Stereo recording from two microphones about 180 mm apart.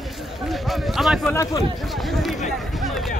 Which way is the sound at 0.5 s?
Centre (ahead or behind).